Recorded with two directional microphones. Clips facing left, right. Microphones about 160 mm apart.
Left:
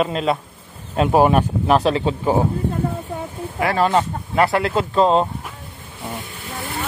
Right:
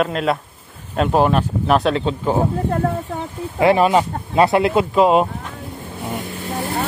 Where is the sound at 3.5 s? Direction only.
20° right (ahead or behind).